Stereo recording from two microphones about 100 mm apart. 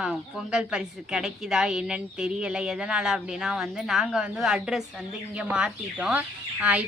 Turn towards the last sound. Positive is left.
turn(degrees=-15)  # may be behind; listen again after turning